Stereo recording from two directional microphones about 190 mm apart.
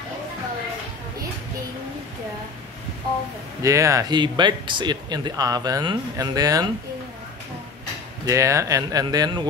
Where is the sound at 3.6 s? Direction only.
15° right (ahead or behind).